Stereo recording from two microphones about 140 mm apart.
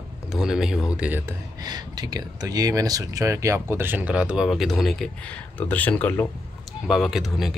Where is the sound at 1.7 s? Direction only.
30° right (ahead or behind); by 6.2 s 10° left (ahead or behind).